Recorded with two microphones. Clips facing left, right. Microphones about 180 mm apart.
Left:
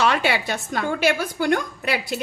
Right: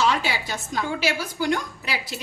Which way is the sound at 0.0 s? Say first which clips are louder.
Left 3 dB; 60° left (ahead or behind).